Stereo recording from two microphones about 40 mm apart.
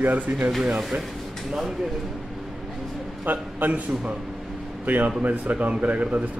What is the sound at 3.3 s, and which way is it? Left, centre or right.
Speech, right.